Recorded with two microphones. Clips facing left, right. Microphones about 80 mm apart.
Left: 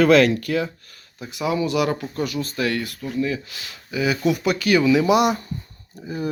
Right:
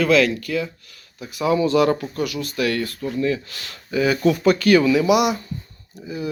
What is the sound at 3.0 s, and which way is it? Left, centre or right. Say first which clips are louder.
Speech: even; centre.